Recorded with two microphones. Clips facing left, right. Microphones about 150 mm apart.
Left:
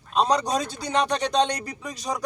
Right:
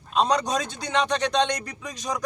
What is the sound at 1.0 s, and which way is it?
Speech, 5° left (ahead or behind).